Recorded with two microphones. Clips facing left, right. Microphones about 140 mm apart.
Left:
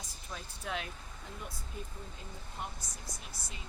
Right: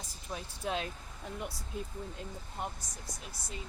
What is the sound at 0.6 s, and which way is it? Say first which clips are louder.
Speech: right 4 dB; 25° right (ahead or behind).